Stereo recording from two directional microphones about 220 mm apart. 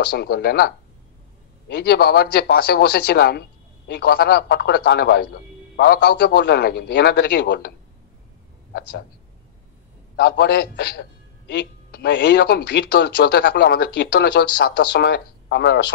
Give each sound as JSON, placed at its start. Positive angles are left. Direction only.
{"t": 0.1, "sound": "a man's voice", "side_deg": 45}
{"t": 10.1, "sound": "a man's voice", "side_deg": 50}